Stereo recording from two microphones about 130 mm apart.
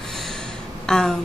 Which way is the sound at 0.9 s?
5° left (ahead or behind).